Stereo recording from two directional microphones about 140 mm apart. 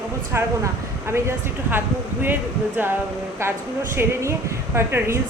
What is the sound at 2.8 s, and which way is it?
A woman's voice, 15° right (ahead or behind).